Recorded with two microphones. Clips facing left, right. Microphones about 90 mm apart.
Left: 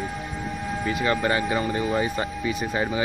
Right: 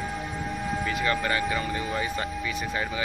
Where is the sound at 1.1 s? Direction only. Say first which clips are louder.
Left 4 dB; 25° left (ahead or behind).